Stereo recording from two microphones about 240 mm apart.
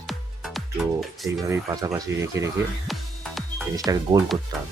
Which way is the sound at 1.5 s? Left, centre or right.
Centre.